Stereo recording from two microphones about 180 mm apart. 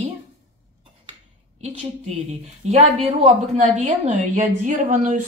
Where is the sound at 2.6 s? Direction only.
35° right (ahead or behind).